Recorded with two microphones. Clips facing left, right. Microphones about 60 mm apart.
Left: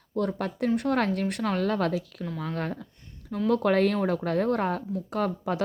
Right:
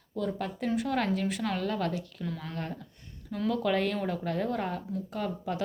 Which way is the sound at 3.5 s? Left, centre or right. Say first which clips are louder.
Left 6 dB; left.